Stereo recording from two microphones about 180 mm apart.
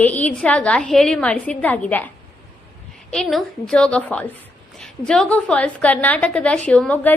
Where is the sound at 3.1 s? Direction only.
Centre (ahead or behind).